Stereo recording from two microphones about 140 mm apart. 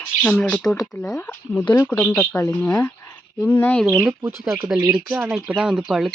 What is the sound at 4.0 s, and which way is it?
Speech, 10° right (ahead or behind).